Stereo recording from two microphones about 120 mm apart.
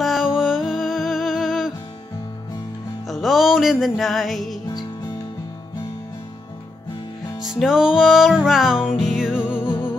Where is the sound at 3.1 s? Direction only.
Centre (ahead or behind).